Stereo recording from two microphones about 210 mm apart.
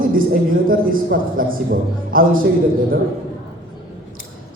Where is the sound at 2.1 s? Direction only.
40° right (ahead or behind).